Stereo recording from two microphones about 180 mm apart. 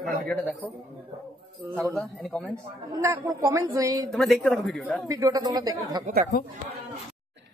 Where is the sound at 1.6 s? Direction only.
15° right (ahead or behind).